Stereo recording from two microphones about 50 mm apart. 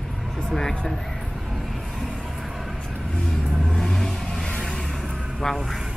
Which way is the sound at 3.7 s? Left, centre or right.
Centre.